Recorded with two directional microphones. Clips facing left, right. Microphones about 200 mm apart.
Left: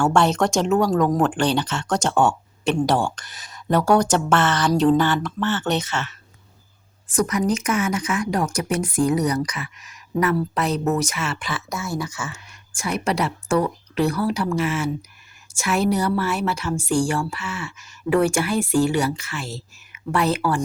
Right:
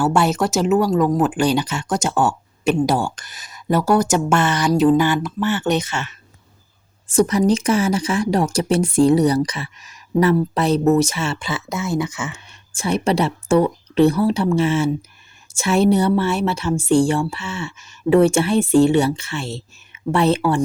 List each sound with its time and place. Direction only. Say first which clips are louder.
0.0 s speech: right 1 dB; 5° right (ahead or behind)
7.1 s speech: right 5 dB; 30° right (ahead or behind)